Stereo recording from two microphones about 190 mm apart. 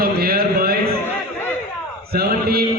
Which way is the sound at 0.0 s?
50° right (ahead or behind).